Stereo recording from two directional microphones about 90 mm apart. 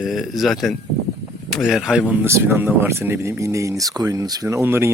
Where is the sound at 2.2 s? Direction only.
30° right (ahead or behind).